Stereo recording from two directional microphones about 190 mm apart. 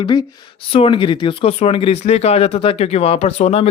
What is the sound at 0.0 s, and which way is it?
Speech, 25° left (ahead or behind).